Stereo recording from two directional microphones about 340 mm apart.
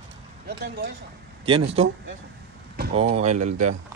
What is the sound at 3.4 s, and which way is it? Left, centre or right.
Speech, right.